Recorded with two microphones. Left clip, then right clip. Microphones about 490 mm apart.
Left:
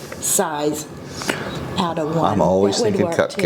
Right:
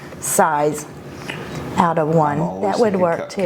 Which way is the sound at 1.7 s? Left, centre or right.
Right.